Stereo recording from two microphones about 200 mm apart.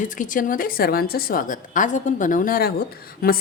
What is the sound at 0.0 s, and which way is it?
A woman's voice, 40° left (ahead or behind).